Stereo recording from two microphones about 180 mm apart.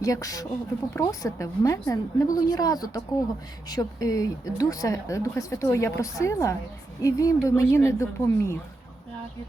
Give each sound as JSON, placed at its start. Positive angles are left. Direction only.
{"t": 0.0, "sound": "a woman's voice", "side_deg": 20}